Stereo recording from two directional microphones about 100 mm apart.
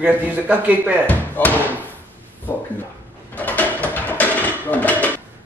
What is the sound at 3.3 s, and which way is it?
Mechanisms, 15° left (ahead or behind).